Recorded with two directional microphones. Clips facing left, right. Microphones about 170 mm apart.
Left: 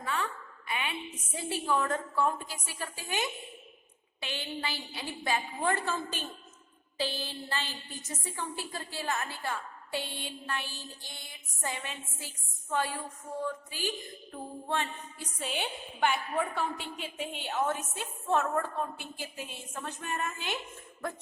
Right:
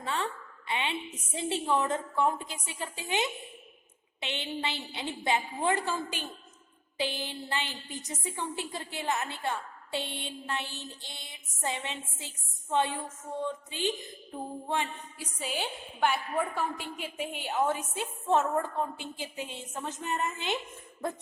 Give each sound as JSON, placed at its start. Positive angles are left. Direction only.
{"t": 0.0, "sound": "a woman's voice", "side_deg": -25}
{"t": 15.4, "sound": "a woman's voice", "side_deg": 0}